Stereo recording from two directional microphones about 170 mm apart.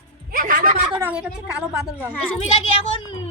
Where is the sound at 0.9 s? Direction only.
10° right (ahead or behind).